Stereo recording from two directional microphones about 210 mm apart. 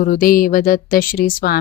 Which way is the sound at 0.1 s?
40° left (ahead or behind).